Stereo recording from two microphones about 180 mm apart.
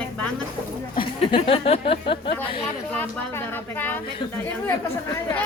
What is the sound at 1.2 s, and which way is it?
A woman's voice, 30° left (ahead or behind).